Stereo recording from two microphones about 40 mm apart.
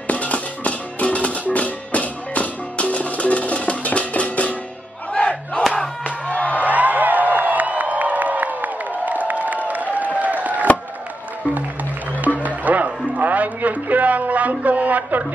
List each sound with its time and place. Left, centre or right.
0.1 s music: left
5.1 s crowd: left
6.0 s music: left
6.6 s music: right
10.1 s chop: right
12.4 s music: right
13.2 s a sound: right